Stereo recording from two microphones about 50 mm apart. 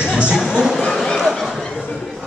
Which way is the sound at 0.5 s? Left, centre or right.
Centre.